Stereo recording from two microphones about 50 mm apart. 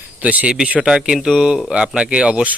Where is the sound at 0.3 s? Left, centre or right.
Right.